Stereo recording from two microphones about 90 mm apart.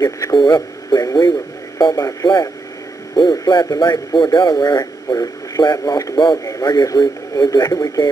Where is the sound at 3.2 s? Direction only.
55° left (ahead or behind).